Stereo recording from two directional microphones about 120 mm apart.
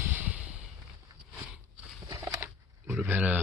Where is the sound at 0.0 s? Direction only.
15° right (ahead or behind).